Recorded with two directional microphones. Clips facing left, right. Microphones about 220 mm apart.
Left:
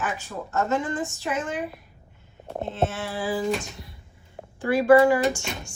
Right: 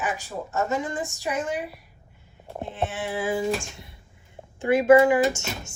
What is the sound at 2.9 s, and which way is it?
A woman's voice, 15° right (ahead or behind).